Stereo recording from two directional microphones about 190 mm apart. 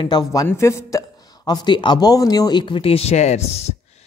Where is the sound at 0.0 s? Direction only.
20° left (ahead or behind).